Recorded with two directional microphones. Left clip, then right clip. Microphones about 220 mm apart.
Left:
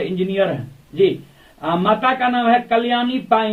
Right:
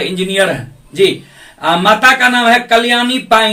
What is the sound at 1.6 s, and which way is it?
Speech, 20° right (ahead or behind).